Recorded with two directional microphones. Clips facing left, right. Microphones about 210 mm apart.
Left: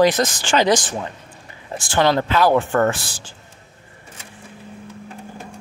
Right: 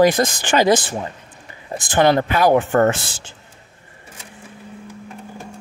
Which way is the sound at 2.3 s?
15° right (ahead or behind).